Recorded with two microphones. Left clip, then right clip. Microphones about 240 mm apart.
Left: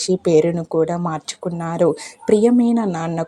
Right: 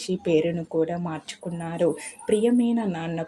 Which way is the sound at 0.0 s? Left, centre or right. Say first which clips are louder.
Left 8 dB; left.